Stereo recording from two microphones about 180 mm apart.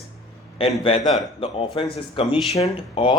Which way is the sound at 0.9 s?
30° left (ahead or behind).